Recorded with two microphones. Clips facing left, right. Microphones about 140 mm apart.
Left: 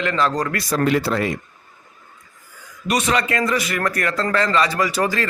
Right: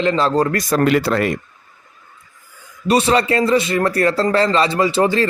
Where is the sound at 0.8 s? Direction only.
70° right (ahead or behind).